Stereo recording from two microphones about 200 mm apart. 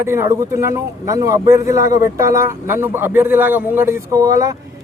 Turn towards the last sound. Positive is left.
turn(degrees=-15)  # may be behind; listen again after turning